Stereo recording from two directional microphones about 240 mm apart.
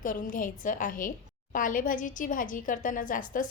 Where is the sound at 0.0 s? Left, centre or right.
Left.